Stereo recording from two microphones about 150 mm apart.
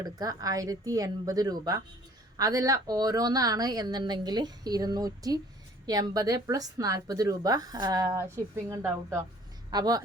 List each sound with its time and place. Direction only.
0.0 s a woman's voice: 25° right (ahead or behind)